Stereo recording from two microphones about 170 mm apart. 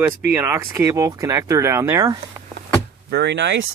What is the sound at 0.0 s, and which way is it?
Speech, 10° right (ahead or behind).